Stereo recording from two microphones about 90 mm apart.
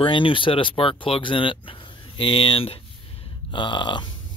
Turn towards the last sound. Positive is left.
turn(degrees=60)  # may be behind; listen again after turning